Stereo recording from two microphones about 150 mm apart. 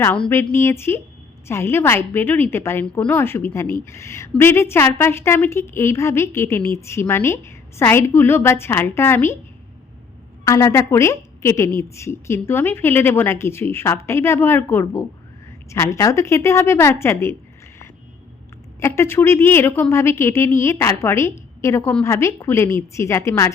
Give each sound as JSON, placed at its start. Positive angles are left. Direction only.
{"t": 0.0, "sound": "a woman's voice", "side_deg": 15}
{"t": 10.4, "sound": "a woman's voice", "side_deg": 20}
{"t": 18.8, "sound": "a woman's voice", "side_deg": 15}